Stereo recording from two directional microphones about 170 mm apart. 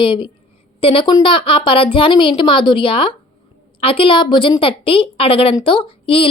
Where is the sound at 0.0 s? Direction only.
30° left (ahead or behind).